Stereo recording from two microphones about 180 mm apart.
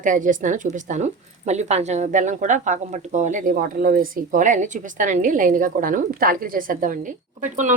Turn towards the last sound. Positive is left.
turn(degrees=-45)  # may be behind; listen again after turning